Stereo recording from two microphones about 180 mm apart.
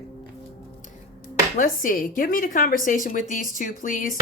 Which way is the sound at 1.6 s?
50° left (ahead or behind).